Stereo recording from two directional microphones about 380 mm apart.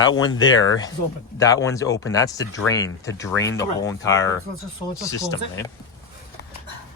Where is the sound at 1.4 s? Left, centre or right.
Centre.